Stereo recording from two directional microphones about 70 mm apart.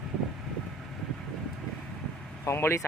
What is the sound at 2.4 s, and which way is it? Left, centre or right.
Speech, left.